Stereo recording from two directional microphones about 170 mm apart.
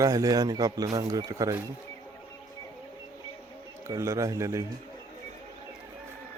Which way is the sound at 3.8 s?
15° right (ahead or behind).